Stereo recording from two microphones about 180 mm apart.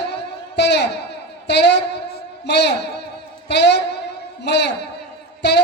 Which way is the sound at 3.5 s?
70° left (ahead or behind).